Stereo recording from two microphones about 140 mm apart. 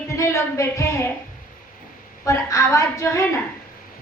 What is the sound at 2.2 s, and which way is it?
A woman's voice, 20° left (ahead or behind).